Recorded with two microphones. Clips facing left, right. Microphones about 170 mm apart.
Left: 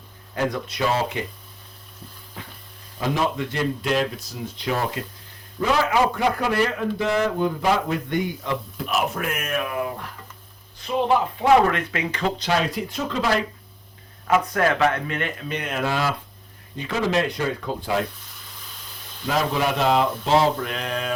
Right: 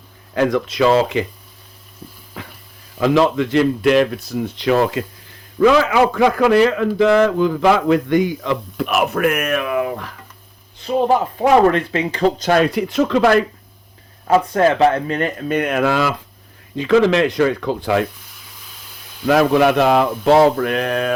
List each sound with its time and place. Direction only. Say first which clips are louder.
0.3 s speech: right 9 dB; 90° right
2.4 s a sound: right 6 dB; 90° right
3.0 s speech: right 9 dB; 90° right
11.3 s speech: right 5 dB; 30° right (ahead or behind)
12.5 s speech: right 8 dB; 60° right (ahead or behind)
14.3 s speech: right 6 dB; 30° right (ahead or behind); by 18.0 s 85° right
19.3 s speech: right 10 dB; 65° right (ahead or behind)